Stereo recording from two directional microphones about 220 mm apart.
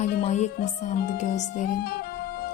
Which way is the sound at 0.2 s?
30° left (ahead or behind).